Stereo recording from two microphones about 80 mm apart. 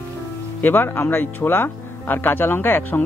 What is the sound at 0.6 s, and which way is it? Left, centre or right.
Speech, left.